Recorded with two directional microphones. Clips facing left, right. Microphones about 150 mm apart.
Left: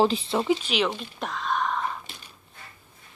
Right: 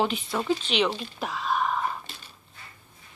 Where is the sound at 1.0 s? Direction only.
5° right (ahead or behind).